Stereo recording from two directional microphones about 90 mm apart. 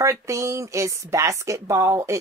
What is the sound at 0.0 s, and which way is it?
Speech, 35° right (ahead or behind).